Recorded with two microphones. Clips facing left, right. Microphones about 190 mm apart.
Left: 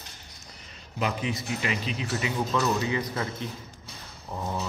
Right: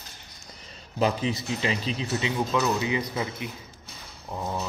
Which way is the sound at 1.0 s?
30° right (ahead or behind).